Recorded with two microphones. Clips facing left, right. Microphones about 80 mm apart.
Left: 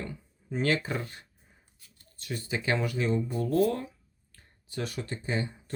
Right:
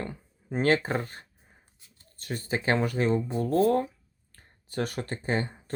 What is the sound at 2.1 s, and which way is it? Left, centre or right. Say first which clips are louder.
Speech: right 3 dB; right.